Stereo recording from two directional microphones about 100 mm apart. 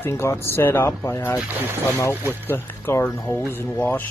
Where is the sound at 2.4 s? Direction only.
20° left (ahead or behind).